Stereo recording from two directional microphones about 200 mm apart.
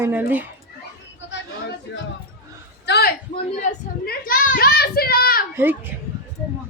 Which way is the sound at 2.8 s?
55° left (ahead or behind).